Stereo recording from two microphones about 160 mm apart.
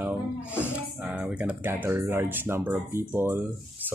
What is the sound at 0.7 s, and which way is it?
Speech, 10° right (ahead or behind).